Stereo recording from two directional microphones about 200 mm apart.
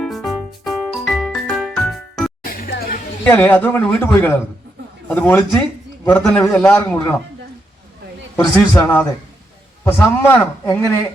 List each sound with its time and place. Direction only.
0.0 s music: centre (ahead or behind)
2.4 s music: 45° left (ahead or behind)
3.2 s a man's voice: 5° left (ahead or behind)
8.7 s a man's voice: 20° left (ahead or behind)